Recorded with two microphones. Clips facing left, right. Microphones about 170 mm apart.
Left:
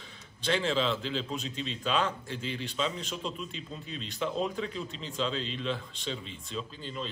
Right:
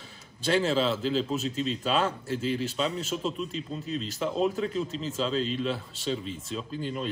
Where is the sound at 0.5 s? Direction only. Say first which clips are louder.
Right 4 dB; 40° right (ahead or behind).